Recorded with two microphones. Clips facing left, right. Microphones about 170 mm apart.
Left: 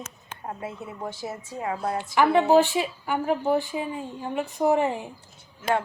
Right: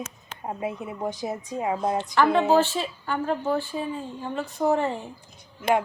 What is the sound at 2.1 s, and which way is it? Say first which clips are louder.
A woman's voice: left 2 dB; 15° left (ahead or behind).